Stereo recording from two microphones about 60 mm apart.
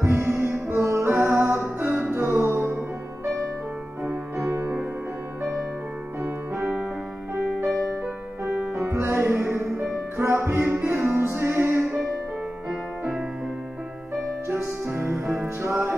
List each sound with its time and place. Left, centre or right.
0.0 s music: right
1.8 s music: right
2.2 s music: right
4.5 s music: right
5.4 s music: centre
8.9 s music: right
10.9 s music: right
14.9 s music: right